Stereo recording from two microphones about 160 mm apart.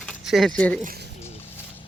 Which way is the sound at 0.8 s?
65° right (ahead or behind).